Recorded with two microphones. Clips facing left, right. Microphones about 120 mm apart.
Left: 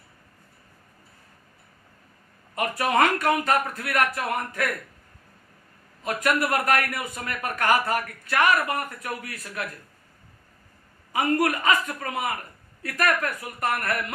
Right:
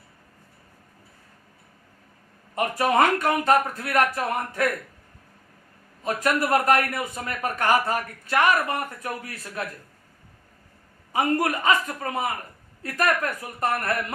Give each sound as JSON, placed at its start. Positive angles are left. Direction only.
{"t": 2.6, "sound": "a man's voice", "side_deg": -30}
{"t": 6.0, "sound": "a man's voice", "side_deg": -30}
{"t": 11.1, "sound": "a man's voice", "side_deg": -30}